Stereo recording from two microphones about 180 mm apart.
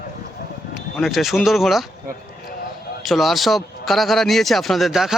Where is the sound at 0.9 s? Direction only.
Centre (ahead or behind).